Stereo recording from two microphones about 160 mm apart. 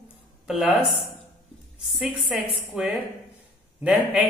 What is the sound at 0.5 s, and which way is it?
Speech, 5° right (ahead or behind).